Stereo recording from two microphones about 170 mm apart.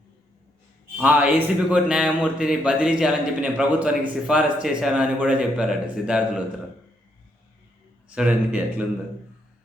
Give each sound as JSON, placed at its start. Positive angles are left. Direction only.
{"t": 0.9, "sound": "speech", "side_deg": -10}
{"t": 8.1, "sound": "speech", "side_deg": -5}